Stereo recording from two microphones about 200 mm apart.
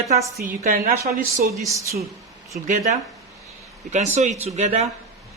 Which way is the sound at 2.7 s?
40° right (ahead or behind).